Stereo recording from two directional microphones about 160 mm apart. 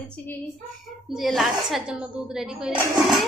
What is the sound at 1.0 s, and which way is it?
A woman's voice, centre (ahead or behind).